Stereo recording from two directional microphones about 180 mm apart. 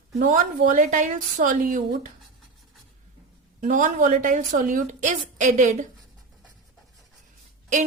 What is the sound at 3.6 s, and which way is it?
A woman's voice, 45° right (ahead or behind).